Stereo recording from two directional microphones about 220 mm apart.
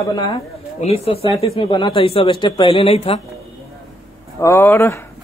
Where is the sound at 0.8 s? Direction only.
25° left (ahead or behind).